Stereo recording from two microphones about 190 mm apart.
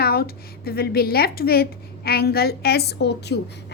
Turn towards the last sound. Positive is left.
turn(degrees=60)  # may be behind; listen again after turning